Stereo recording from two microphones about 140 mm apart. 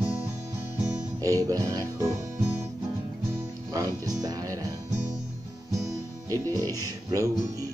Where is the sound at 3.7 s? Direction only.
25° right (ahead or behind).